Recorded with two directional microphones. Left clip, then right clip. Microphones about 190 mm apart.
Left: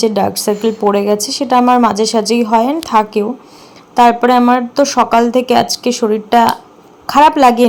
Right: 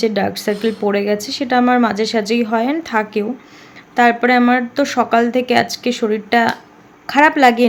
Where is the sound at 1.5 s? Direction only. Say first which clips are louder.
Left 5 dB; 15° right (ahead or behind).